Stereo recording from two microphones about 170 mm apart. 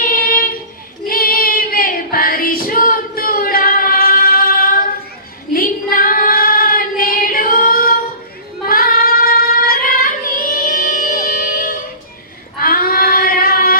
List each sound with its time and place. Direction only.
0.0 s a sound: 55° left (ahead or behind)
1.0 s female singing: 60° left (ahead or behind)
8.7 s child singing: 60° left (ahead or behind)
10.5 s music: 55° left (ahead or behind)
12.5 s female singing: 55° left (ahead or behind)